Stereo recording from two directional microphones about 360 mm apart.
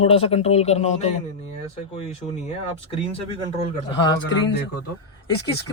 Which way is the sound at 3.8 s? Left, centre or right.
Centre.